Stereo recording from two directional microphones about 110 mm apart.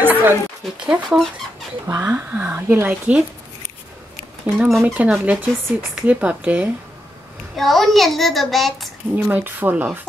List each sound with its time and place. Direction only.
0.0 s a sound: 20° right (ahead or behind)
0.7 s speech: 10° right (ahead or behind)
4.6 s speech: 5° right (ahead or behind)
7.5 s a child's voice: centre (ahead or behind)
9.1 s speech: 15° right (ahead or behind)